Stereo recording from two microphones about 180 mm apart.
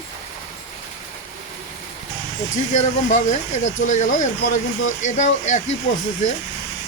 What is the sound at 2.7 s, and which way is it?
Speech, 40° left (ahead or behind).